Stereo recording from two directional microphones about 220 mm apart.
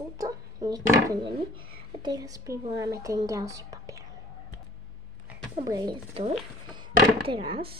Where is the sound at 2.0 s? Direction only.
15° right (ahead or behind).